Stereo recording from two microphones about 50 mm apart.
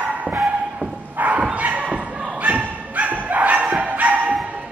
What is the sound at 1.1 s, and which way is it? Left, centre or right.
Bow-wow, right.